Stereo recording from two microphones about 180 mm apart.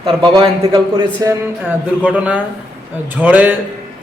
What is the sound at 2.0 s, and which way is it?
Speech, 5° right (ahead or behind).